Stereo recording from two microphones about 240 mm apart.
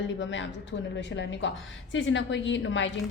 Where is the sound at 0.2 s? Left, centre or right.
Left.